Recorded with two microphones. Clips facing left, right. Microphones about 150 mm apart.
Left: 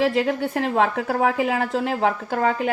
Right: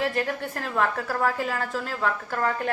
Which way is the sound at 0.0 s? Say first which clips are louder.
Left 6 dB; 80° left.